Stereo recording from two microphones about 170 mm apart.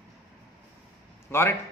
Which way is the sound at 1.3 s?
15° left (ahead or behind).